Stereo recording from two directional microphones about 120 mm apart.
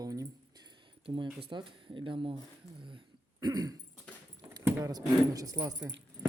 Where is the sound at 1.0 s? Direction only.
40° right (ahead or behind).